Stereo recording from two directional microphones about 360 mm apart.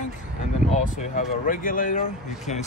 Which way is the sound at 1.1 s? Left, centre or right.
Left.